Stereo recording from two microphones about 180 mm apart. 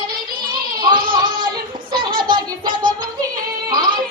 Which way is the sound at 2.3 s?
25° right (ahead or behind).